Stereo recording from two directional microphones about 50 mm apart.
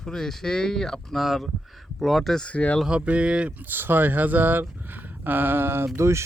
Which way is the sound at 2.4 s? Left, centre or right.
Left.